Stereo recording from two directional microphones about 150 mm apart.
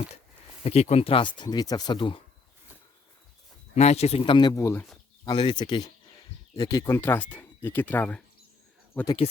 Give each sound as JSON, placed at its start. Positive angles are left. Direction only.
{"t": 0.6, "sound": "speech", "side_deg": 45}
{"t": 3.8, "sound": "speech", "side_deg": 45}
{"t": 5.2, "sound": "speech", "side_deg": 30}
{"t": 9.2, "sound": "speech", "side_deg": 45}